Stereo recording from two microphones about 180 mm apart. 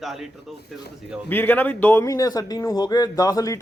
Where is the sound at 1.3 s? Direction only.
10° left (ahead or behind).